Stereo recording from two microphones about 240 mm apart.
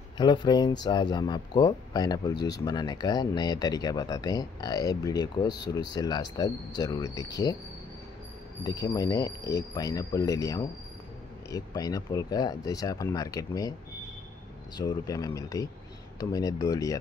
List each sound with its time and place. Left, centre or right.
0.2 s speech: centre
8.6 s speech: centre
14.8 s speech: centre